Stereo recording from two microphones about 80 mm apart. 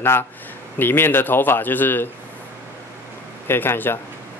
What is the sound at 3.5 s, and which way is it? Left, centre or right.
Speech, left.